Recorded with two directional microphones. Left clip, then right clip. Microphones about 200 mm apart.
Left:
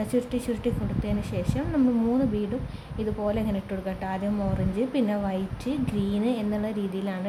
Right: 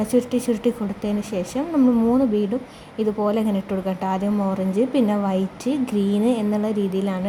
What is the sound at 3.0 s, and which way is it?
A woman's voice, 20° right (ahead or behind).